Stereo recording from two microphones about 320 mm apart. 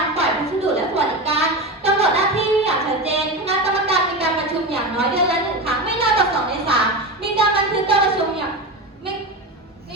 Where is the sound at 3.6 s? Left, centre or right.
Centre.